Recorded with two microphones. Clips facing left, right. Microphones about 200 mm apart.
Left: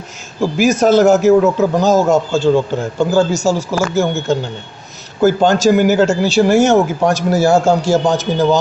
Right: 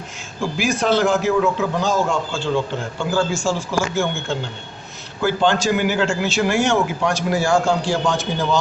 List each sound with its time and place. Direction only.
0.5 s a man's voice: 45° left (ahead or behind)